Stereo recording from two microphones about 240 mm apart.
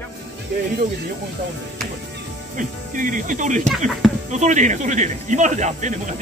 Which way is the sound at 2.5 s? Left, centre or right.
Right.